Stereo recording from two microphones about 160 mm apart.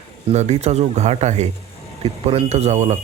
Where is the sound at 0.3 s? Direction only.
45° right (ahead or behind).